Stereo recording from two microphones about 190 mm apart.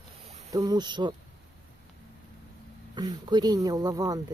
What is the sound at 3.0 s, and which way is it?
Speech, 25° right (ahead or behind).